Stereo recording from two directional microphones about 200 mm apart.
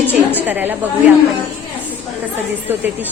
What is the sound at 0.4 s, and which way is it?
Speech, 10° right (ahead or behind).